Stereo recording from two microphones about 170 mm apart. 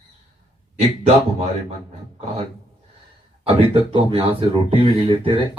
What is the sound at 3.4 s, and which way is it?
Speech, 35° right (ahead or behind).